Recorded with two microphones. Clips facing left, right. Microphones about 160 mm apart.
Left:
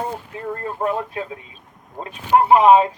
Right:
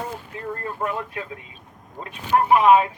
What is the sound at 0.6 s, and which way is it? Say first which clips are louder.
Speech: left 6 dB; 30° left (ahead or behind).